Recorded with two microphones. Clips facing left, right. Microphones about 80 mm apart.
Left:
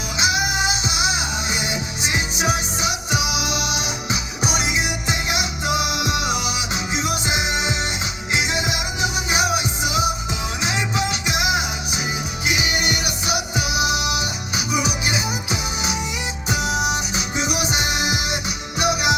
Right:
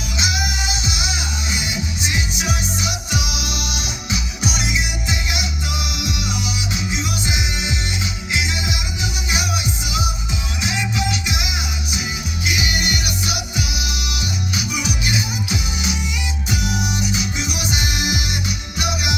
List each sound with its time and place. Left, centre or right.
0.2 s music: left